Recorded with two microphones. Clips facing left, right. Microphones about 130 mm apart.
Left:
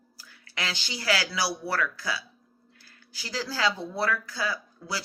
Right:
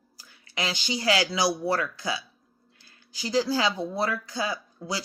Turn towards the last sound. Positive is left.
turn(degrees=-20)  # may be behind; listen again after turning